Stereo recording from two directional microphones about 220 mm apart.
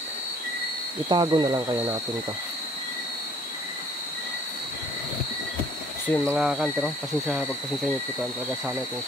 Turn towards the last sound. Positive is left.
turn(degrees=0)  # may be behind; listen again after turning